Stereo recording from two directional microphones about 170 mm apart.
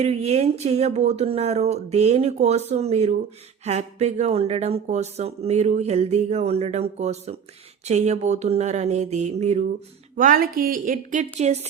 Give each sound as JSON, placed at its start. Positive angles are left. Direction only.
{"t": 0.0, "sound": "speech", "side_deg": -40}
{"t": 10.2, "sound": "a woman's voice", "side_deg": -55}